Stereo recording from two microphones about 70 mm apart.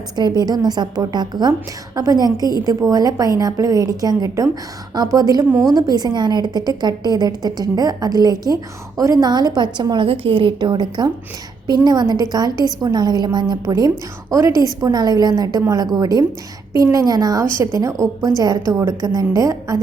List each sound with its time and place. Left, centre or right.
0.2 s a woman's voice: right
2.0 s a woman's voice: right
12.8 s a woman's voice: right
14.5 s a woman's voice: right